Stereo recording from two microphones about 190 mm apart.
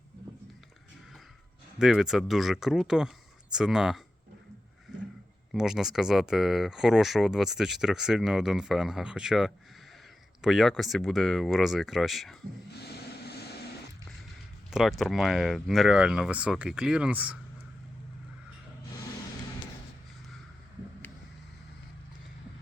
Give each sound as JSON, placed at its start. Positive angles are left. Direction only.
{"t": 1.8, "sound": "speech", "side_deg": 0}
{"t": 5.5, "sound": "speech", "side_deg": -5}
{"t": 12.7, "sound": "vehicle", "side_deg": 60}
{"t": 14.7, "sound": "speech", "side_deg": 0}